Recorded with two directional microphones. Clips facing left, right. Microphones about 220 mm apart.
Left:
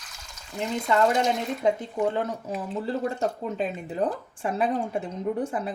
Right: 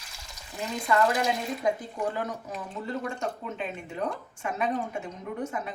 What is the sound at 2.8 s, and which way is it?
Speech, 35° left (ahead or behind).